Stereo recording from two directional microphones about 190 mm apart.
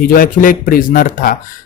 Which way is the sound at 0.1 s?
50° left (ahead or behind).